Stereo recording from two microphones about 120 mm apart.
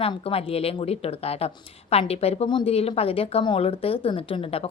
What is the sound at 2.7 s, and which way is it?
A woman's voice, 55° left (ahead or behind).